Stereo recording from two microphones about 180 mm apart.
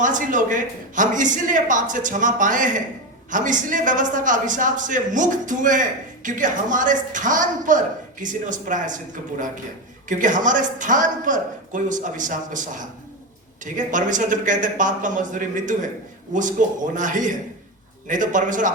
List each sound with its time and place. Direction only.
0.0 s a woman's voice: 45° right (ahead or behind)
10.1 s a woman's voice: 45° right (ahead or behind)
13.7 s a woman's voice: 45° right (ahead or behind)